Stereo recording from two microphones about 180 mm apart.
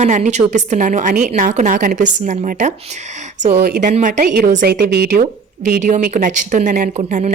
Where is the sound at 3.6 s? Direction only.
60° right (ahead or behind).